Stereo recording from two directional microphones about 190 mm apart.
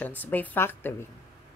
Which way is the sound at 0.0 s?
10° left (ahead or behind).